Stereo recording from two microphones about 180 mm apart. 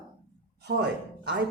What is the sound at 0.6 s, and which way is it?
Speech, 65° right (ahead or behind).